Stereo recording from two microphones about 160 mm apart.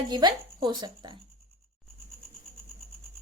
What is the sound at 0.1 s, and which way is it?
Speech, 25° right (ahead or behind).